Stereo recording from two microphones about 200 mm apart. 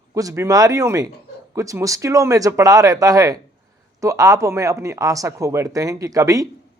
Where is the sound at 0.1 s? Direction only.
15° right (ahead or behind).